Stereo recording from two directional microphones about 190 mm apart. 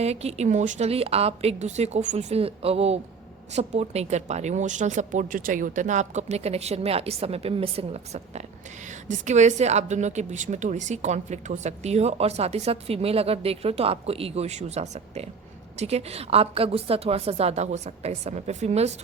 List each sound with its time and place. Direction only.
0.0 s a woman's voice: 35° right (ahead or behind)